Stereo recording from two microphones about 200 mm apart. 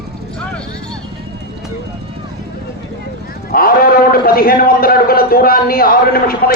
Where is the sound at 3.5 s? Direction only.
45° left (ahead or behind).